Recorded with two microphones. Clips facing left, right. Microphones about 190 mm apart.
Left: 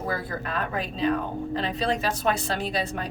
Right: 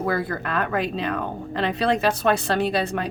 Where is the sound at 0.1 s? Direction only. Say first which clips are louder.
Right 5 dB; 70° right (ahead or behind).